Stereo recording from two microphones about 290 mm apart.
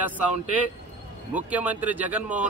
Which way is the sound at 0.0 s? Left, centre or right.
Centre.